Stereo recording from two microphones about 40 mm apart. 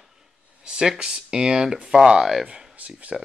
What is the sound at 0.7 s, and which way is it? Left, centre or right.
Speech, right.